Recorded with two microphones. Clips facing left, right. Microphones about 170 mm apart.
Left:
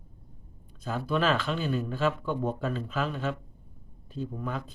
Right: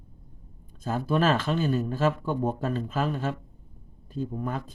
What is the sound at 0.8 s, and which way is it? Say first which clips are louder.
Speech: right 3 dB; 45° right (ahead or behind).